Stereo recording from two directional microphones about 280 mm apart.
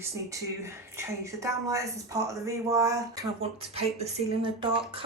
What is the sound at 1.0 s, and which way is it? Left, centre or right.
Speech, centre.